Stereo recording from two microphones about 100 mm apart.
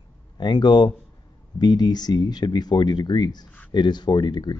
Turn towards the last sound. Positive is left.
turn(degrees=45)  # may be behind; listen again after turning